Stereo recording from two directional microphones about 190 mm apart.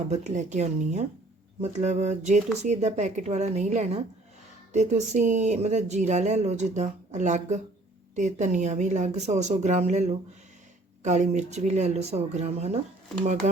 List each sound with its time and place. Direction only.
0.1 s speech: 40° right (ahead or behind)